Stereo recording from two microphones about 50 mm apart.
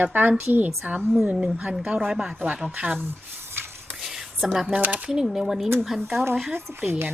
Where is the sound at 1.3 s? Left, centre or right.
Centre.